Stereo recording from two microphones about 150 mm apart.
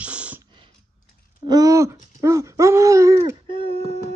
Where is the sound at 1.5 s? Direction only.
20° right (ahead or behind).